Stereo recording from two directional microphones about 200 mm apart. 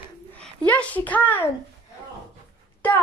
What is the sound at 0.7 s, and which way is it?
Speech, 5° left (ahead or behind).